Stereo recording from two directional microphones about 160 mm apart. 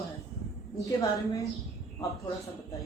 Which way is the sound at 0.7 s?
20° left (ahead or behind).